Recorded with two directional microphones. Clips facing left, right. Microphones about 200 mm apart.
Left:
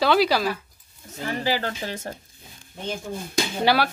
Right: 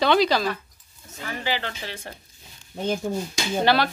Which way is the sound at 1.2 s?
35° left (ahead or behind).